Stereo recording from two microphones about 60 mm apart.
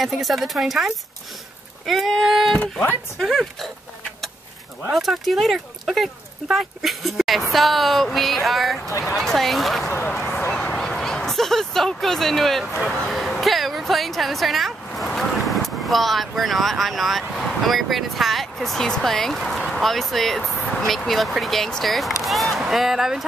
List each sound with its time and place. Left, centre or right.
0.0 s speech: centre
2.6 s speech: left
3.2 s speech: centre
4.9 s speech: centre
9.8 s speech: left
10.6 s speech: centre